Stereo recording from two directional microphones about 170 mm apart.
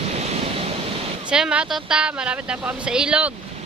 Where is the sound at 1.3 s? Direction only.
5° right (ahead or behind).